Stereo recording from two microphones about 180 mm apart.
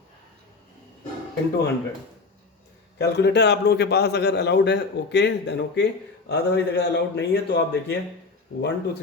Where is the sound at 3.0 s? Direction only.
70° left (ahead or behind).